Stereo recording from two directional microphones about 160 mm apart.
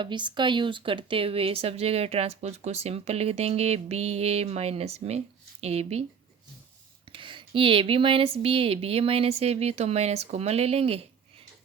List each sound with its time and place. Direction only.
0.0 s speech: 30° right (ahead or behind)
7.1 s speech: 30° right (ahead or behind)